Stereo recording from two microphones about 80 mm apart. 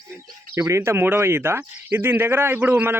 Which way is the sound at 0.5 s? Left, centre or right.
Right.